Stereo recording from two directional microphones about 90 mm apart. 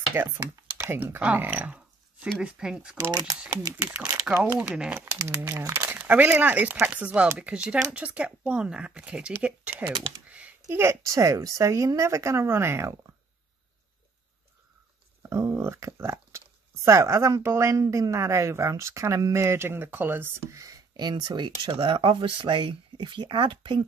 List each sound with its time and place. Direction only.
0.1 s speech: 25° right (ahead or behind)
2.3 s speech: 5° right (ahead or behind)
3.1 s speech: 50° right (ahead or behind)
4.6 s speech: 10° right (ahead or behind)
4.9 s speech: 30° right (ahead or behind)
10.2 s computer keyboard: 15° right (ahead or behind)
10.7 s speech: 30° right (ahead or behind)
15.2 s speech: 30° right (ahead or behind)
20.5 s speech: 40° right (ahead or behind)
21.7 s speech: 75° right (ahead or behind); by 23.8 s 60° right (ahead or behind)